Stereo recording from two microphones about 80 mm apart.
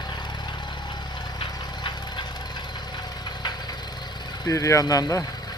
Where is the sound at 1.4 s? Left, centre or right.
Left.